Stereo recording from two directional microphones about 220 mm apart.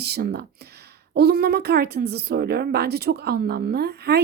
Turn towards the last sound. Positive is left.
turn(degrees=-45)  # may be behind; listen again after turning